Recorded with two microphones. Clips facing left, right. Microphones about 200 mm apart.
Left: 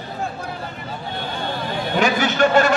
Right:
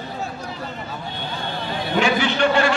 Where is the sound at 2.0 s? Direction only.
45° left (ahead or behind).